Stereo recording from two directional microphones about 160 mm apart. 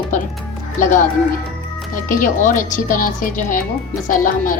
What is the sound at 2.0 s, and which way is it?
A woman's voice, 55° left (ahead or behind).